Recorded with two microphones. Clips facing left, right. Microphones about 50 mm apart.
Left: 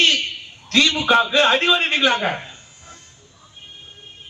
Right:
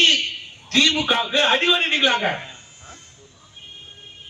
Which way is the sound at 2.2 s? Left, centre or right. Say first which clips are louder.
Even; right.